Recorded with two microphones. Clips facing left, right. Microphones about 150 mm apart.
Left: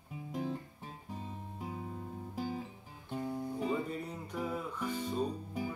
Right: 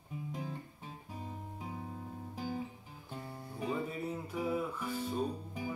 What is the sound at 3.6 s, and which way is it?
Music, 5° right (ahead or behind).